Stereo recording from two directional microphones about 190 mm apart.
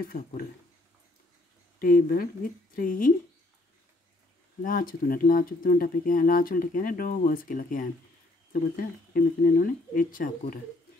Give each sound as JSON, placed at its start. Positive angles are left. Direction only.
{"t": 0.1, "sound": "speech", "side_deg": 50}
{"t": 1.8, "sound": "speech", "side_deg": 50}
{"t": 4.6, "sound": "speech", "side_deg": 50}